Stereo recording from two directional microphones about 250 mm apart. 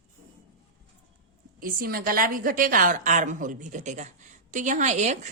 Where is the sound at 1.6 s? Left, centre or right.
Right.